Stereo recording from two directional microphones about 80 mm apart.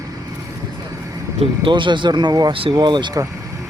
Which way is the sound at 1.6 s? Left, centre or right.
Right.